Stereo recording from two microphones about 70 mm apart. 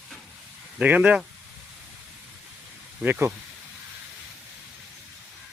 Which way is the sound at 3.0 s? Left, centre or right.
Right.